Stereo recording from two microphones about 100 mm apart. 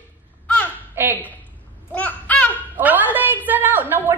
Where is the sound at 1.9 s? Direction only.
15° left (ahead or behind).